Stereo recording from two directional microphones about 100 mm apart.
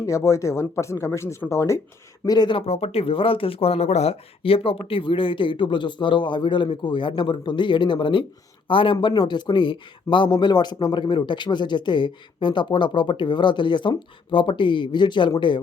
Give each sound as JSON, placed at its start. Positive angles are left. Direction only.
{"t": 0.0, "sound": "speech", "side_deg": 30}
{"t": 2.2, "sound": "speech", "side_deg": 40}
{"t": 2.5, "sound": "a man's voice", "side_deg": 80}